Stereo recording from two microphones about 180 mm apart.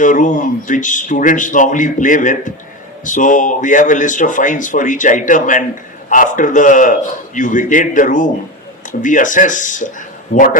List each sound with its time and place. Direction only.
0.0 s speech: 45° left (ahead or behind)